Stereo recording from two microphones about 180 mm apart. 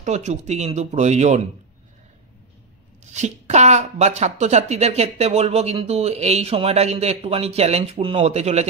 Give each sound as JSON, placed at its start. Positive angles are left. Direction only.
{"t": 0.0, "sound": "speech", "side_deg": -40}
{"t": 3.1, "sound": "speech", "side_deg": -40}